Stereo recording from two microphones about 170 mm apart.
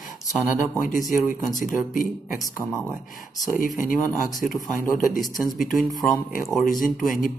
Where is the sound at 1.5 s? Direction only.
55° left (ahead or behind).